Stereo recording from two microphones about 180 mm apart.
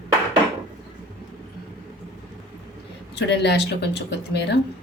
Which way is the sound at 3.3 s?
70° left (ahead or behind).